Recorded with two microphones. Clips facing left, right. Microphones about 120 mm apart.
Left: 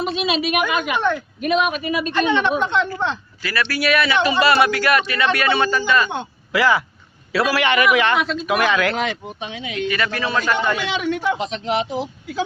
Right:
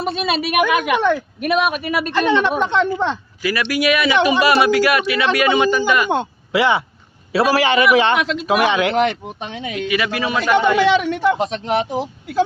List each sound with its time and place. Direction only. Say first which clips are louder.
0.0 s a woman's voice: right 1 dB; 50° right (ahead or behind)
3.4 s speech: right 4 dB; 15° right (ahead or behind)
6.5 s a man's voice: right 1 dB; 25° right (ahead or behind)
8.2 s speech: right 2 dB; 90° right
8.4 s a man's voice: right 3 dB; 25° right (ahead or behind)
9.0 s a man's voice: right 6 dB; 55° right (ahead or behind)
9.9 s speech: right 3 dB; 10° right (ahead or behind)
10.8 s a man's voice: right 7 dB; 55° right (ahead or behind)